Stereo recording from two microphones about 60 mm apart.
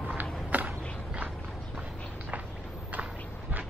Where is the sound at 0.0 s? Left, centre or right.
Right.